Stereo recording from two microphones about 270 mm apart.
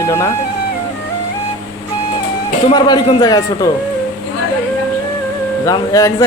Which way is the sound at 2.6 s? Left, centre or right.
Centre.